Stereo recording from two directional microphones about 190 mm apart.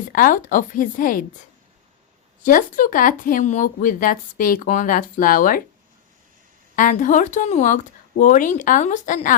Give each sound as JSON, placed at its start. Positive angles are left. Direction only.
{"t": 0.1, "sound": "speech", "side_deg": 45}
{"t": 2.4, "sound": "speech", "side_deg": 45}
{"t": 6.7, "sound": "speech", "side_deg": 45}